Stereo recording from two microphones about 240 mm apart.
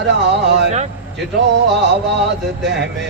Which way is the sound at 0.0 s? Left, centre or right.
Right.